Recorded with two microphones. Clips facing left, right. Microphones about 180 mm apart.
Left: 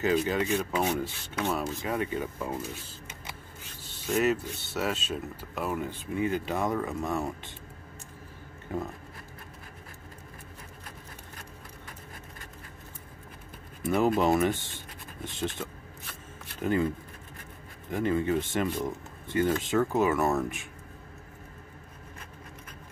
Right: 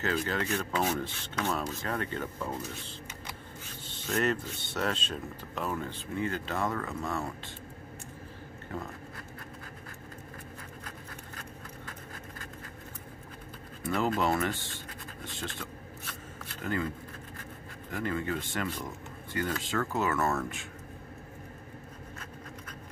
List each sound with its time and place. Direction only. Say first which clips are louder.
0.0 s speech: left 5 dB; 15° left (ahead or behind)
3.8 s speech: left 3 dB; 5° left (ahead or behind)
13.8 s speech: left 4 dB; 20° left (ahead or behind)
16.6 s speech: left 6 dB; 20° left (ahead or behind)
17.9 s speech: left 6 dB; 20° left (ahead or behind)